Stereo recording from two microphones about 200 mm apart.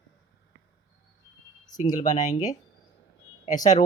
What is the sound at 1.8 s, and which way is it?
Speech, 35° left (ahead or behind).